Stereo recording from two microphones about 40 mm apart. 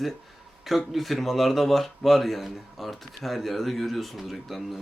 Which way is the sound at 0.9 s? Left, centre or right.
Centre.